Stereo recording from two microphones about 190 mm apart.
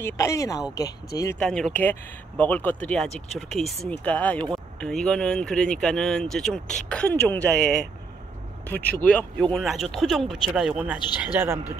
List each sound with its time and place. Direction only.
0.0 s speech: 15° left (ahead or behind)
1.4 s a man's voice: 5° left (ahead or behind); by 11.7 s 10° right (ahead or behind)